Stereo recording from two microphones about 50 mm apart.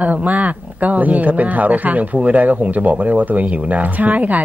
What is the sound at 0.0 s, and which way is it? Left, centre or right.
Speech, right.